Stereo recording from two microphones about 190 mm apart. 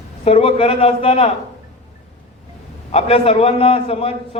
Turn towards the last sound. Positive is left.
turn(degrees=30)  # may be behind; listen again after turning